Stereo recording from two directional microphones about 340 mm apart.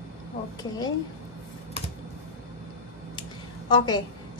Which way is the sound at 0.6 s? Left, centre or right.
Centre.